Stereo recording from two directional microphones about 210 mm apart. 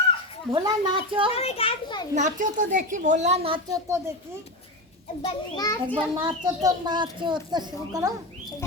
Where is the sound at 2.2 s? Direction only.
35° right (ahead or behind).